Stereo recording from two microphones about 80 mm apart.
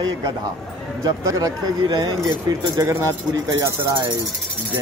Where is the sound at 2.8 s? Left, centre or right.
Right.